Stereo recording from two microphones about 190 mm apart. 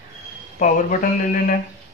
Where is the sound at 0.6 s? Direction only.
45° left (ahead or behind).